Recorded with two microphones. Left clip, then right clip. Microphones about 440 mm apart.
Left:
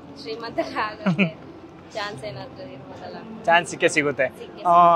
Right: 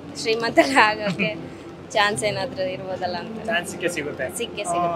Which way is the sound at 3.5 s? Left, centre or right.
Left.